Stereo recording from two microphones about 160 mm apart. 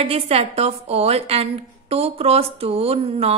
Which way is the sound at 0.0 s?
40° right (ahead or behind).